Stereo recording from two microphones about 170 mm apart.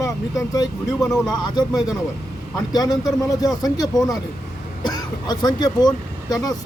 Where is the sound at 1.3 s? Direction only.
25° left (ahead or behind).